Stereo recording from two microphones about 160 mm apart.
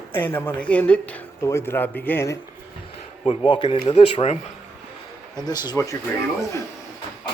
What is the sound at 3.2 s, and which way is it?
Speech, 30° left (ahead or behind).